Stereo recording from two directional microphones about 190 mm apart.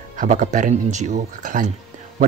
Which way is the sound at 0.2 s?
45° right (ahead or behind).